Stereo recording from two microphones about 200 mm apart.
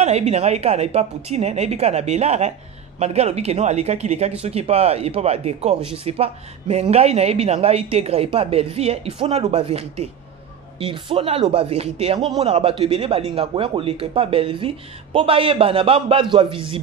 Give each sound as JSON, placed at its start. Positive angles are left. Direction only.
{"t": 0.0, "sound": "a man's voice", "side_deg": -35}